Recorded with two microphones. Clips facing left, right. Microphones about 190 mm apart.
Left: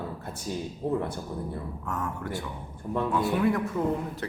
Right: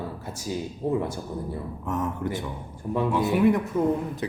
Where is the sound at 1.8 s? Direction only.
20° right (ahead or behind).